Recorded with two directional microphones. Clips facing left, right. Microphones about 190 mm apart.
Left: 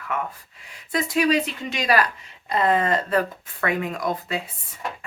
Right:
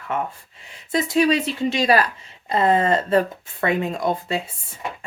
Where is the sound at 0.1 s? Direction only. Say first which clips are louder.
Right 3 dB; 25° right (ahead or behind).